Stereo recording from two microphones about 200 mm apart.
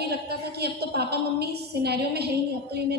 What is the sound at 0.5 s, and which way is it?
A woman's voice, 55° right (ahead or behind).